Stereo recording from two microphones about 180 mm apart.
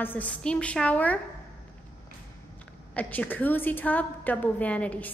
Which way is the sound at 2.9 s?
10° left (ahead or behind).